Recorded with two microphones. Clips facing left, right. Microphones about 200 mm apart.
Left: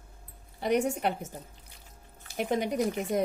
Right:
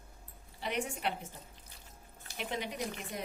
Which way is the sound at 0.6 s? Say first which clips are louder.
Left 9 dB; 45° left (ahead or behind).